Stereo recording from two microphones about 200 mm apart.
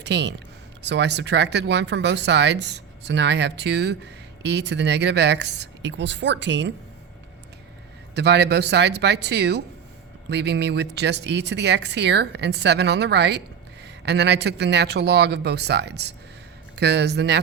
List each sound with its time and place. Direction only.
0.0 s speech: 60° right (ahead or behind)
8.1 s speech: 60° right (ahead or behind)